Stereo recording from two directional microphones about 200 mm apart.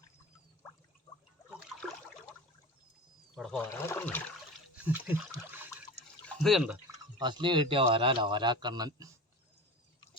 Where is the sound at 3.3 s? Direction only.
5° left (ahead or behind).